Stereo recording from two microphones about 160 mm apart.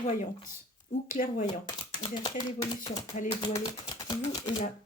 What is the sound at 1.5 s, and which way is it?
Speech, 25° left (ahead or behind).